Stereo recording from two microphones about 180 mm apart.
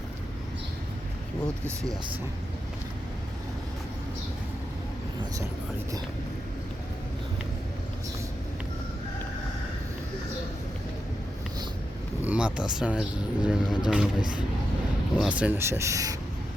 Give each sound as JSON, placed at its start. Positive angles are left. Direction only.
{"t": 1.6, "sound": "speech", "side_deg": -20}
{"t": 12.2, "sound": "speech", "side_deg": -10}
{"t": 15.2, "sound": "speech", "side_deg": -10}